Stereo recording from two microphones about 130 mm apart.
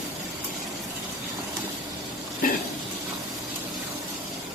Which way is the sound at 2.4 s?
90° left.